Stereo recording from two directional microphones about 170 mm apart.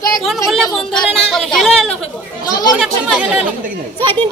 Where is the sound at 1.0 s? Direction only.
Centre (ahead or behind).